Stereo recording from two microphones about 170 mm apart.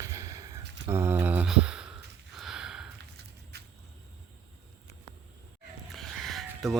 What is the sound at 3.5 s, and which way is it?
Vehicle, 75° right (ahead or behind).